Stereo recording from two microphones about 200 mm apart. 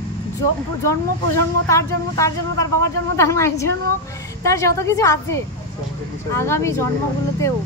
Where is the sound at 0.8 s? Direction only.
15° left (ahead or behind).